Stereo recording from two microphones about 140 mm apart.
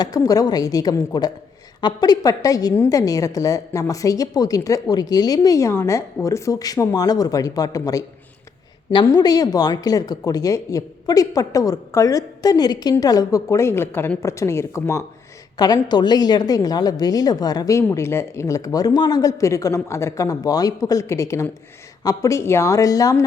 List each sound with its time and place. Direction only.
0.0 s a woman's voice: 25° left (ahead or behind)
9.0 s a woman's voice: 25° left (ahead or behind)